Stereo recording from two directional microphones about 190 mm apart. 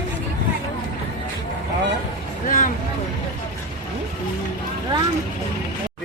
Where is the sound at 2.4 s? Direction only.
40° left (ahead or behind).